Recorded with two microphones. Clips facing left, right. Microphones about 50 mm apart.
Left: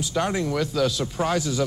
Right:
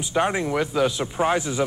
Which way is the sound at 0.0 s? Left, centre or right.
Right.